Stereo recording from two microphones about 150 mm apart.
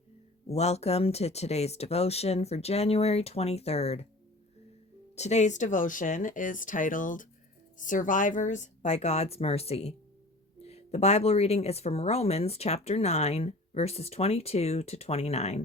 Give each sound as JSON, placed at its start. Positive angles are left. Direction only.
{"t": 0.4, "sound": "speech", "side_deg": 45}
{"t": 5.1, "sound": "speech", "side_deg": 50}